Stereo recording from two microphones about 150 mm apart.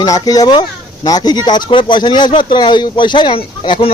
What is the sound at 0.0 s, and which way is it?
Speech, 25° left (ahead or behind).